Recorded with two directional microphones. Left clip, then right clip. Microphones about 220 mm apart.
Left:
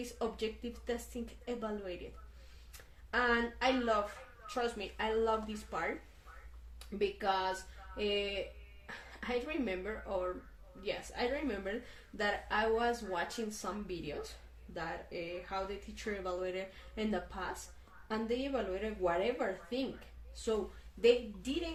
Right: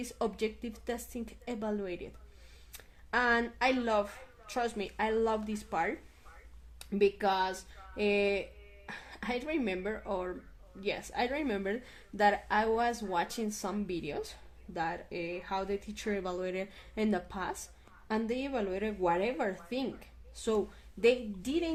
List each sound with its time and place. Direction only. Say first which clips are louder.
0.0 s speech: right 4 dB; 50° right (ahead or behind)
3.1 s speech: right 3 dB; 50° right (ahead or behind)
21.0 s speech: right 1 dB; 50° right (ahead or behind)